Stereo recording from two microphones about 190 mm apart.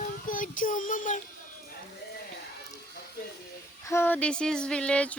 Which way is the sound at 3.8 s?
10° left (ahead or behind).